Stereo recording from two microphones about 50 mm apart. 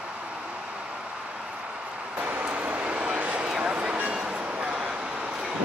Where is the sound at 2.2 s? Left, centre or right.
Right.